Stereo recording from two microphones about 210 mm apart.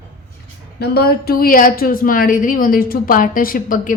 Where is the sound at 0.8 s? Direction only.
50° left (ahead or behind).